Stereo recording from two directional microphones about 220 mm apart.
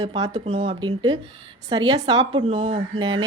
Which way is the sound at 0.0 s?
20° right (ahead or behind).